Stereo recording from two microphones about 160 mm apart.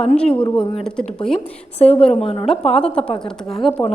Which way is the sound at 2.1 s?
40° left (ahead or behind).